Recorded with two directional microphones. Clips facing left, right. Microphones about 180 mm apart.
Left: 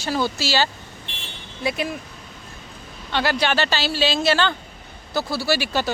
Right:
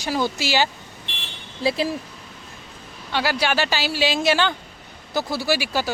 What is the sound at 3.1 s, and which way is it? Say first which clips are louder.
Speech: left 1 dB; 5° right (ahead or behind).